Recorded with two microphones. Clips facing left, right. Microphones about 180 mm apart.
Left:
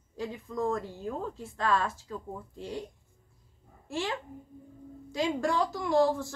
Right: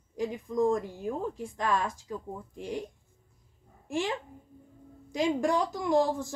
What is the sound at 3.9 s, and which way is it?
A child's voice, 20° right (ahead or behind).